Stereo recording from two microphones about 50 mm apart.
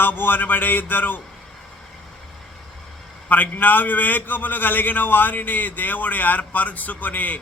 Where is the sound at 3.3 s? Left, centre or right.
Left.